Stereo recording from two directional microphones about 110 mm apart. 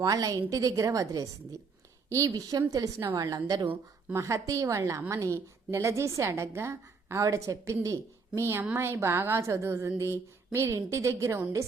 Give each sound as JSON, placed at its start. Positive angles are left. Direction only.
{"t": 0.0, "sound": "a woman's voice", "side_deg": -35}
{"t": 3.7, "sound": "a woman's voice", "side_deg": -25}